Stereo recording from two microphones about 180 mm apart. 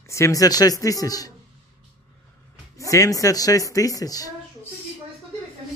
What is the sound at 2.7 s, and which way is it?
A woman's voice, 20° left (ahead or behind).